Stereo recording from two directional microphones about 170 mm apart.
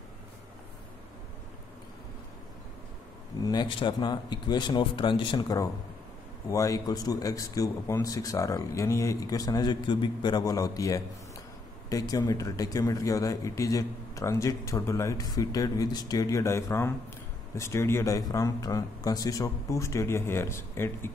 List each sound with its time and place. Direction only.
3.4 s speech: 25° left (ahead or behind)